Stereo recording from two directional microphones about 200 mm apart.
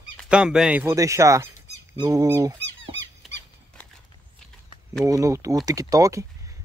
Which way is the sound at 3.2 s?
Centre (ahead or behind).